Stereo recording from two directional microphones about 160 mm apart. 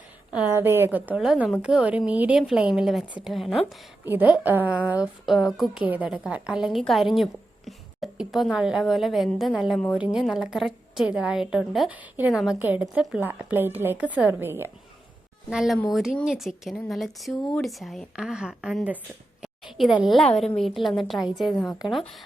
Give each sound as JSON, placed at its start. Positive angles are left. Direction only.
{"t": 0.3, "sound": "a woman's voice", "side_deg": -15}
{"t": 4.0, "sound": "a woman's voice", "side_deg": -10}
{"t": 15.4, "sound": "a woman's voice", "side_deg": 0}